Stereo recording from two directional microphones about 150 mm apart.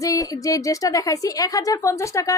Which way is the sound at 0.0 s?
20° left (ahead or behind).